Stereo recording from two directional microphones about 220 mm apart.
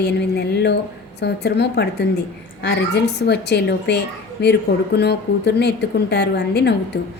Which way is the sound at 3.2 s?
50° left (ahead or behind).